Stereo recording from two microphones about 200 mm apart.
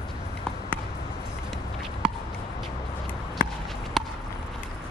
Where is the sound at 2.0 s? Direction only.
5° right (ahead or behind).